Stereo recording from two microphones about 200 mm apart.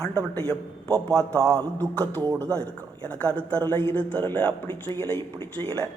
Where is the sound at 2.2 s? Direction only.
15° right (ahead or behind).